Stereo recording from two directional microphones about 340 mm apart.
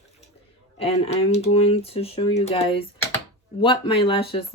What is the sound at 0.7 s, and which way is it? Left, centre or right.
Speech, centre.